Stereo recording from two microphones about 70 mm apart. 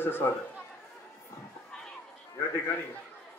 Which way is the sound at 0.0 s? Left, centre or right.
Left.